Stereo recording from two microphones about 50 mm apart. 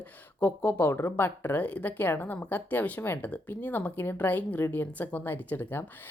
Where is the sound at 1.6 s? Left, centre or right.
Left.